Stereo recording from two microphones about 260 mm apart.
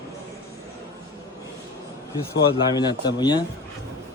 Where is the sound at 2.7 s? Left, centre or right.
Centre.